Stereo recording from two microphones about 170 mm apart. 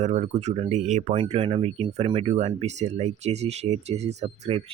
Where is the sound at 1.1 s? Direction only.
35° right (ahead or behind).